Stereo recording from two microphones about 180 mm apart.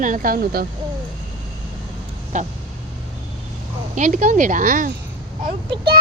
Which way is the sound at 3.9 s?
45° right (ahead or behind).